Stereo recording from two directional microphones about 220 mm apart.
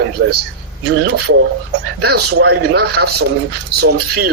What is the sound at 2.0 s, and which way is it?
Speech, 50° right (ahead or behind).